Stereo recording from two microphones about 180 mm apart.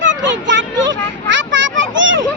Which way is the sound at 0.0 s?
90° right.